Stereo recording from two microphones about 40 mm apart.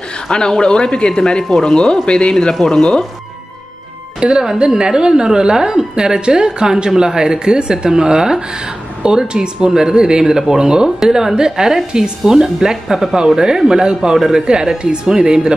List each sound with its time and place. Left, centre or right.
0.3 s speech: centre
2.5 s speech: centre
2.8 s speech: centre
4.2 s a woman's voice: right
13.7 s a woman's voice: centre